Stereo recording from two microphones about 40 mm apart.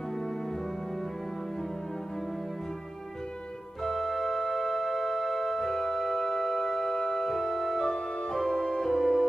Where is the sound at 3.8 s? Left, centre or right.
Centre.